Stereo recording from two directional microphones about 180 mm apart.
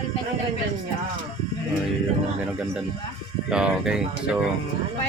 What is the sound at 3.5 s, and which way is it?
Speech, 5° right (ahead or behind).